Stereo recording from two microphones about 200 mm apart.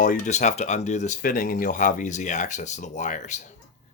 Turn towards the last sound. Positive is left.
turn(degrees=40)  # may be behind; listen again after turning